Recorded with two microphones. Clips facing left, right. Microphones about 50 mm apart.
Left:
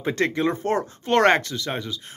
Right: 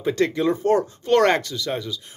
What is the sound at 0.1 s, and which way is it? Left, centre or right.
Speech, left.